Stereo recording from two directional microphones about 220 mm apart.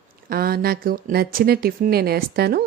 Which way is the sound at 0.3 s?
40° right (ahead or behind).